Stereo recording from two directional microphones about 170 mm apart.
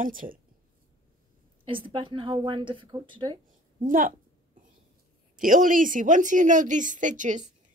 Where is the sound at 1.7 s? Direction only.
30° right (ahead or behind).